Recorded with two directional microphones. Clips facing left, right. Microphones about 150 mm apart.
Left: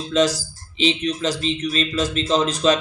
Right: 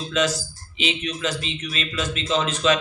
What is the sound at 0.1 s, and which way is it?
Speech, 35° left (ahead or behind).